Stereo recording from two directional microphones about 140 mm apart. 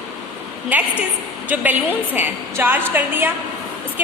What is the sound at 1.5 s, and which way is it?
A woman's voice, 10° right (ahead or behind).